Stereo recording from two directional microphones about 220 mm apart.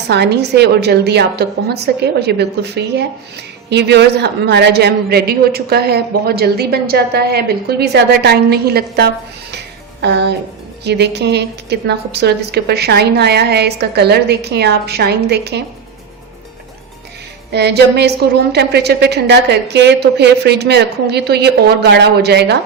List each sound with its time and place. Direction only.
0.1 s a woman's voice: 50° right (ahead or behind)
17.5 s a woman's voice: 50° right (ahead or behind)